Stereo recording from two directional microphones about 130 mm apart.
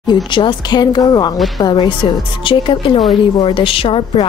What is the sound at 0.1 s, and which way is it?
A woman's voice, 35° left (ahead or behind).